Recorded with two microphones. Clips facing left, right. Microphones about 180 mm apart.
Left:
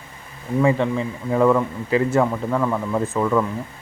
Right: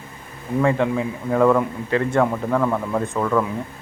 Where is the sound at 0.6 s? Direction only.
Centre (ahead or behind).